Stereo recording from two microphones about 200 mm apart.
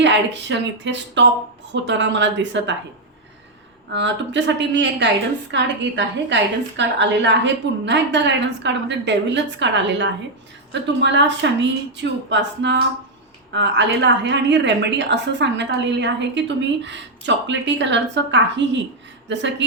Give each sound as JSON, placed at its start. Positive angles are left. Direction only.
{"t": 0.0, "sound": "a woman's voice", "side_deg": -60}
{"t": 3.9, "sound": "a woman's voice", "side_deg": -60}